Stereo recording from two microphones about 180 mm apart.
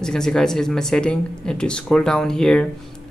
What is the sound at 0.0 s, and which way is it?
Speech, 5° left (ahead or behind).